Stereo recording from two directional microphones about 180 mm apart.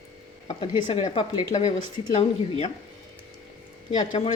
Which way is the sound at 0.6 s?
25° left (ahead or behind).